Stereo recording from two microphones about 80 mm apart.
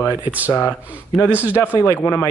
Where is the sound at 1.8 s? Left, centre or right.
Left.